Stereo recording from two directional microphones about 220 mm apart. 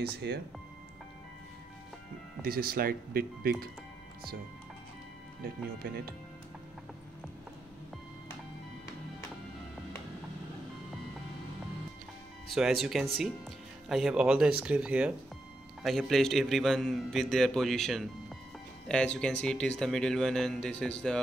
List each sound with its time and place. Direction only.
0.0 s speech: 45° right (ahead or behind)
2.4 s speech: 40° right (ahead or behind)
5.4 s speech: 45° right (ahead or behind)
12.4 s a man's voice: centre (ahead or behind)